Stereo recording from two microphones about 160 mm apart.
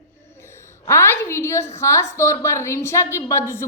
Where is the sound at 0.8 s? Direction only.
15° left (ahead or behind).